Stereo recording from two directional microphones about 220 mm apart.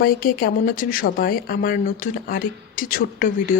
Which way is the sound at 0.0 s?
40° left (ahead or behind).